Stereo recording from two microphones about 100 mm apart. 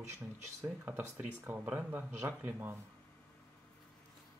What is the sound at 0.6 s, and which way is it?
Speech, 15° right (ahead or behind).